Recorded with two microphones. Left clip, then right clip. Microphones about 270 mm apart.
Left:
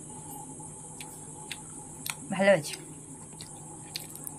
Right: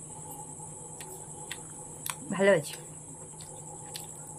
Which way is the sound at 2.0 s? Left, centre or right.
Centre.